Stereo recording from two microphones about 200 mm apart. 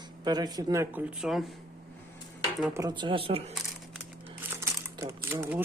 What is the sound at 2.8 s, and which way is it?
Speech, 20° right (ahead or behind).